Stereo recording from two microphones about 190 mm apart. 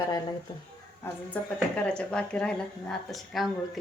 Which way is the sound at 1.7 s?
5° left (ahead or behind).